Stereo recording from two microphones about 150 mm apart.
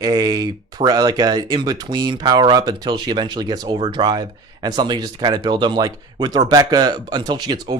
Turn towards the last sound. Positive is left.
turn(degrees=-30)  # may be behind; listen again after turning